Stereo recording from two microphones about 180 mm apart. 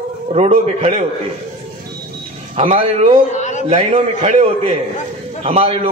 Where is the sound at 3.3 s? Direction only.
40° left (ahead or behind).